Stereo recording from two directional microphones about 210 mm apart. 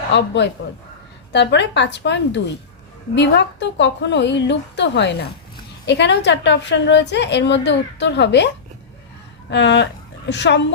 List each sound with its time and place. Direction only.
0.1 s a woman's voice: 55° left (ahead or behind)
9.5 s a woman's voice: 55° left (ahead or behind)